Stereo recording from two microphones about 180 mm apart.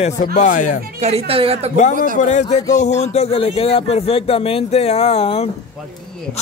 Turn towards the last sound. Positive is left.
turn(degrees=35)  # may be behind; listen again after turning